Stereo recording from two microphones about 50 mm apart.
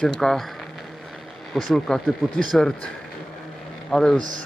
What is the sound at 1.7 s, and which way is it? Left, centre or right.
Speech, centre.